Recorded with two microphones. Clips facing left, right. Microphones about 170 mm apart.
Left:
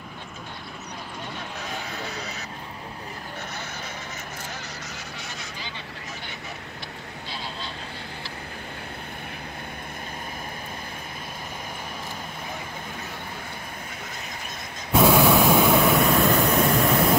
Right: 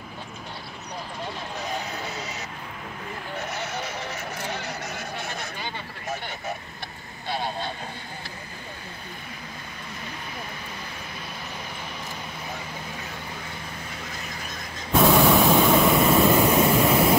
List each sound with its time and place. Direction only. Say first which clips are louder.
4.9 s a sound: right 5 dB; 55° right (ahead or behind)
7.2 s vehicle: right 8 dB; 55° right (ahead or behind)
14.9 s vehicle: even; 5° left (ahead or behind)